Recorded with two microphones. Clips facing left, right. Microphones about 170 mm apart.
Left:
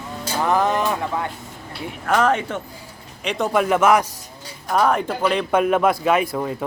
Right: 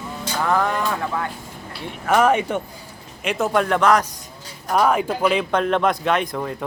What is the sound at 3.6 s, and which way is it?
Speech, 10° left (ahead or behind).